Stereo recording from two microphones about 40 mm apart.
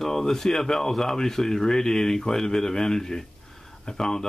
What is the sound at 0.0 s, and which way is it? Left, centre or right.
Speech, centre.